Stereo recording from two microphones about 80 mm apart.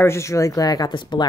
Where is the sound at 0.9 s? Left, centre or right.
Left.